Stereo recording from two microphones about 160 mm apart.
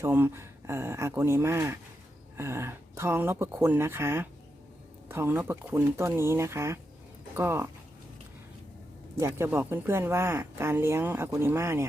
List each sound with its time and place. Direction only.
0.0 s speech: 15° right (ahead or behind)
9.1 s speech: 15° right (ahead or behind)